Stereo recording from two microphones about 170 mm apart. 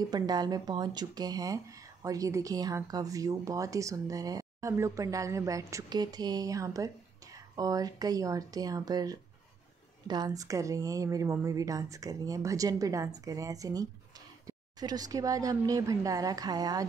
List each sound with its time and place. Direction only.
0.1 s speech: 25° right (ahead or behind)